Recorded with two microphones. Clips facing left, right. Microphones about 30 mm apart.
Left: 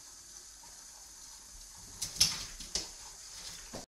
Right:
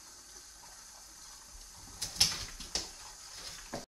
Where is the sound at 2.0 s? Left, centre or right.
Centre.